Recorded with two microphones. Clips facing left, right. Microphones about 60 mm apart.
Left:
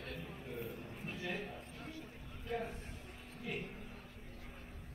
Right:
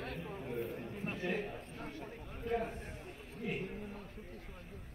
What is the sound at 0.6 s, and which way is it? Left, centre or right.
A man's voice, right.